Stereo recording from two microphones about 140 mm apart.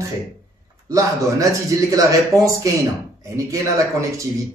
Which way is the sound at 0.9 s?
25° right (ahead or behind).